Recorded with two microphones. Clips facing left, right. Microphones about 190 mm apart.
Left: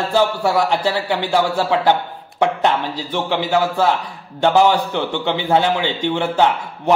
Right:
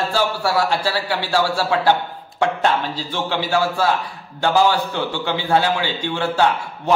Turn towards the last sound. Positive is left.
turn(degrees=20)  # may be behind; listen again after turning